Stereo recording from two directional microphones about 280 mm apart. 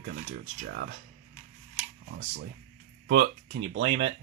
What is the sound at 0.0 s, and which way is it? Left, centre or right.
Speech, right.